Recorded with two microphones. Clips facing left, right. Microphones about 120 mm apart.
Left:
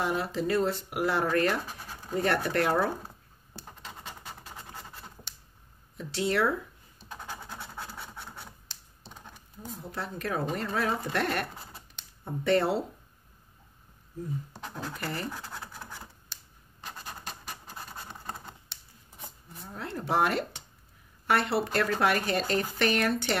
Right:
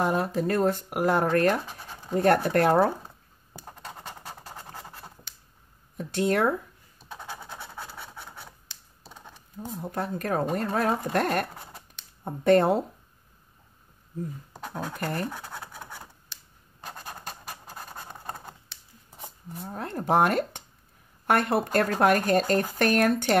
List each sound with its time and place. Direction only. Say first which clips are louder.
0.0 s speech: right 4 dB; 45° right (ahead or behind)
1.7 s scratch: right 2 dB; 5° left (ahead or behind)
2.1 s speech: right 6 dB; 45° right (ahead or behind)
4.7 s scratch: right 2 dB; 15° right (ahead or behind)
5.9 s speech: right 3 dB; 50° right (ahead or behind)
7.1 s scratch: right 2 dB; 5° right (ahead or behind)
9.0 s computer keyboard: right 1 dB; 5° right (ahead or behind)
9.8 s speech: right 6 dB; 50° right (ahead or behind)
15.0 s speech: right 5 dB; 45° right (ahead or behind)
19.7 s speech: right 5 dB; 45° right (ahead or behind)